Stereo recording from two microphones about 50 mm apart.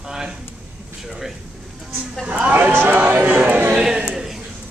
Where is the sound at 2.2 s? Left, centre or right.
Right.